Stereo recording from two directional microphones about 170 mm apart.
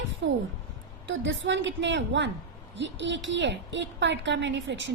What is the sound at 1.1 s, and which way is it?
A woman's voice, 90° right.